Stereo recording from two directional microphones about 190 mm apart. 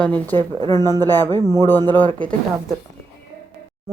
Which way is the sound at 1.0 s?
10° left (ahead or behind).